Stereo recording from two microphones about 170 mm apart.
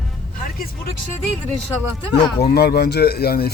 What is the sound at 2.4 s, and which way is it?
Speech, 70° left (ahead or behind).